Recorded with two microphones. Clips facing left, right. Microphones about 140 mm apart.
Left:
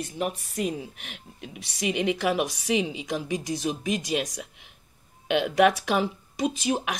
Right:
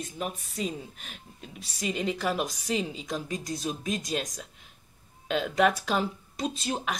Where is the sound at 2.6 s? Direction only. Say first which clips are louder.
Left 4 dB; 70° left (ahead or behind).